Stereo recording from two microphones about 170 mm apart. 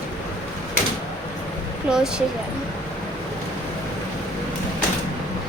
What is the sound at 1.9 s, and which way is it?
Speech, 5° right (ahead or behind).